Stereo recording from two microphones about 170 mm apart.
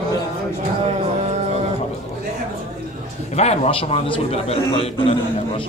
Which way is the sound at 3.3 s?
40° left (ahead or behind).